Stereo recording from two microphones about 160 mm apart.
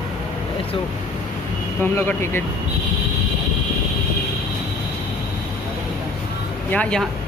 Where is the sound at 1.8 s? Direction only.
15° left (ahead or behind).